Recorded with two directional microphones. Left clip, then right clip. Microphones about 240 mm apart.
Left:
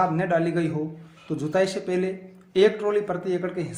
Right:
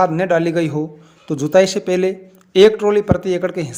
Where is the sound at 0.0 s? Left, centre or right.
Right.